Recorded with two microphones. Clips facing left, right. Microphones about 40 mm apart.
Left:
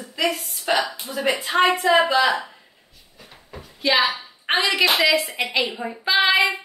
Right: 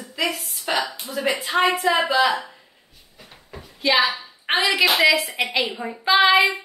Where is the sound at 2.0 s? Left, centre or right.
Centre.